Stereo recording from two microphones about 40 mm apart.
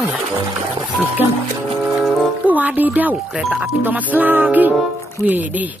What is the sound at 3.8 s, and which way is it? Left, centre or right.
Music, right.